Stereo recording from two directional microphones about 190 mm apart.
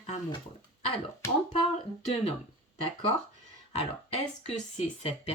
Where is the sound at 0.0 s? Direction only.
35° left (ahead or behind).